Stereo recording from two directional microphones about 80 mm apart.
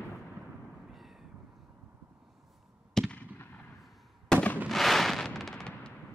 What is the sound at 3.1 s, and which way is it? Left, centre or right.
Fireworks, left.